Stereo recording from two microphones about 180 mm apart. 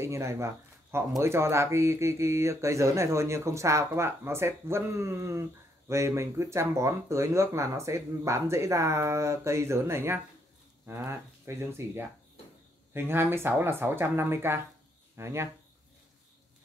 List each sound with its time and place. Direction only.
0.0 s speech: 15° right (ahead or behind)